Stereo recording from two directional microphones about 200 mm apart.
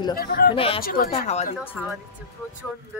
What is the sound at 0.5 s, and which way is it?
Speech, 30° left (ahead or behind).